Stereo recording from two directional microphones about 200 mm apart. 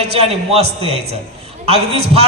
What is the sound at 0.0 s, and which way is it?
A man's voice, 30° right (ahead or behind).